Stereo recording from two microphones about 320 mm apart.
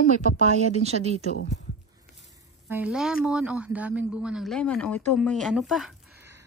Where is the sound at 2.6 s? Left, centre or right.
Centre.